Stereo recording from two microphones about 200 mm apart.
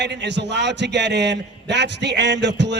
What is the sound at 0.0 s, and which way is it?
A man's voice, 60° right (ahead or behind).